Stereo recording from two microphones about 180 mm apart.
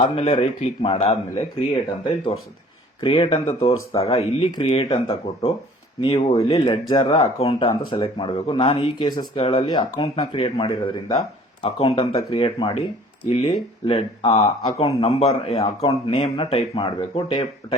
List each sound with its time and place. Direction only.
0.0 s speech: 35° left (ahead or behind)
3.0 s speech: 30° left (ahead or behind)